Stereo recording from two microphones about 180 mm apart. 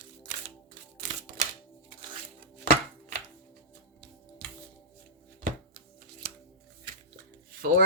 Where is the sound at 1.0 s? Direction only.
50° right (ahead or behind).